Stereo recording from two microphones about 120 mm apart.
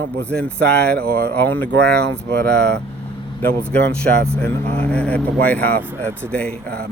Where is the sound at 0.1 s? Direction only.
10° left (ahead or behind).